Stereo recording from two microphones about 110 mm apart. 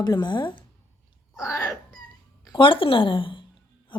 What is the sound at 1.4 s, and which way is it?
Dog, 30° left (ahead or behind).